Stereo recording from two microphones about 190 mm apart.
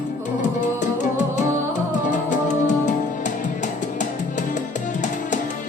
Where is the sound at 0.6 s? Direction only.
40° left (ahead or behind).